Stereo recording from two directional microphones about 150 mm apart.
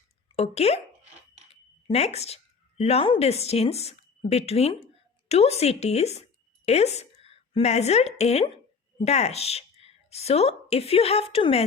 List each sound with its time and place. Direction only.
0.3 s speech: 45° left (ahead or behind)
1.9 s speech: 45° left (ahead or behind)
7.2 s a sound: 35° right (ahead or behind)
7.5 s a woman's voice: 45° left (ahead or behind)